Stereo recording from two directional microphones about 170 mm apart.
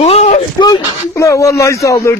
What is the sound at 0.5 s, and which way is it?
Speech, 25° left (ahead or behind).